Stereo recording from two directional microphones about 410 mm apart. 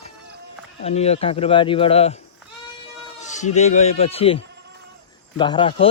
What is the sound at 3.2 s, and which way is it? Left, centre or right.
Speech, centre.